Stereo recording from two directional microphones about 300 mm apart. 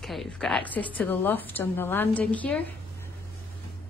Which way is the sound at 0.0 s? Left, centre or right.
Centre.